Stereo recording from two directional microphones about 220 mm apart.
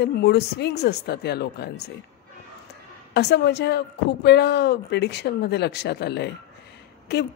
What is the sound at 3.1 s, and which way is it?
A woman's voice, 50° left (ahead or behind).